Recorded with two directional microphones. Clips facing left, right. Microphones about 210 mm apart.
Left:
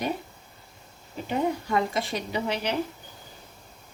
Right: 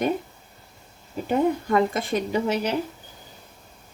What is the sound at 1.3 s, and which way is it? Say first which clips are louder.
A woman's voice: right 5 dB; 50° right (ahead or behind).